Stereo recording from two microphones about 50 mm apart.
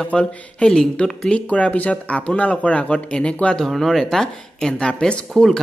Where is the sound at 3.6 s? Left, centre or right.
Centre.